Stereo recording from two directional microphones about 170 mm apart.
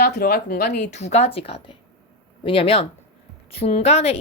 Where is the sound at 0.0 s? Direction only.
70° left (ahead or behind).